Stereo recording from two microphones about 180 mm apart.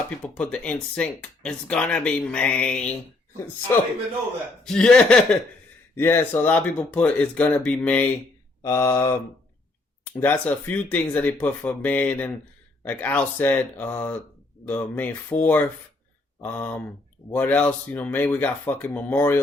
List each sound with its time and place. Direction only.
0.2 s speech: 5° left (ahead or behind)
4.6 s speech: 5° left (ahead or behind)